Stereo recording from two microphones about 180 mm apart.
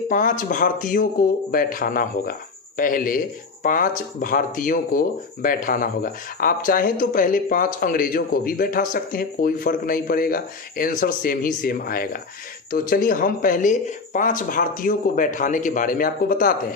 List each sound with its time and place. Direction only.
0.1 s speech: 50° left (ahead or behind)